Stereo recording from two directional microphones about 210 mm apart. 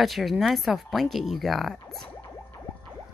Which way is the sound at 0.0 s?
Centre (ahead or behind).